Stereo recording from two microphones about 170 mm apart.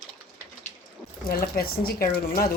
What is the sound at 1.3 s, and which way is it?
A man's voice, 60° left (ahead or behind).